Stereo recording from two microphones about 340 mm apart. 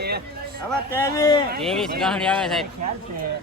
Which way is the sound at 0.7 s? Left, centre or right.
Centre.